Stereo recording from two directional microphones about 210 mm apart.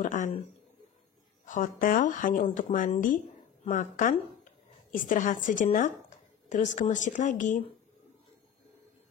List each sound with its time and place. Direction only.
0.0 s a woman's voice: 35° left (ahead or behind)
1.4 s a woman's voice: 40° left (ahead or behind)